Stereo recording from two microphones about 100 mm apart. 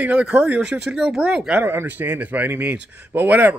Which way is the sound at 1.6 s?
20° right (ahead or behind).